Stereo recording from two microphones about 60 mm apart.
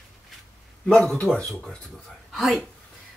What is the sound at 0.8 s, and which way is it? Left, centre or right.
Speech, centre.